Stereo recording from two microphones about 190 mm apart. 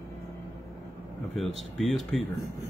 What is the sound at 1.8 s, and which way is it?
Speech, centre (ahead or behind).